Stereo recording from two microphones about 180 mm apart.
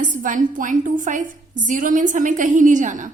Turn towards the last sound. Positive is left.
turn(degrees=-45)  # may be behind; listen again after turning